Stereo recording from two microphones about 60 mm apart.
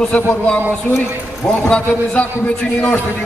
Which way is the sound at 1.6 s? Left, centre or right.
Centre.